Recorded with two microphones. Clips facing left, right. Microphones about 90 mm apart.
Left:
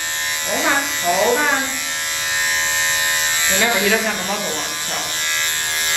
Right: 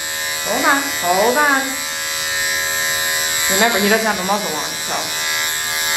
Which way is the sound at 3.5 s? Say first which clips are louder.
Right 3 dB; 20° right (ahead or behind).